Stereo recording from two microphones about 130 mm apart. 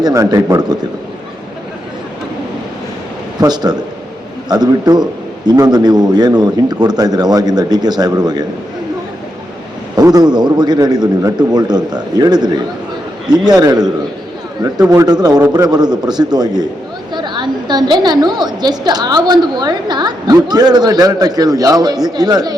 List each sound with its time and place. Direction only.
0.0 s a man's voice: 25° right (ahead or behind)
3.4 s a woman's voice: 30° right (ahead or behind)
9.9 s a woman's voice: 30° right (ahead or behind)
13.6 s a woman's voice: 30° right (ahead or behind)